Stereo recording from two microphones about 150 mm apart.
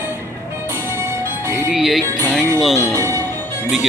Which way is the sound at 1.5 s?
Centre (ahead or behind).